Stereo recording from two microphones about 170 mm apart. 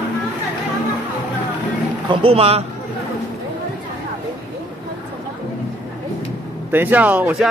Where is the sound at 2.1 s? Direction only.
30° right (ahead or behind).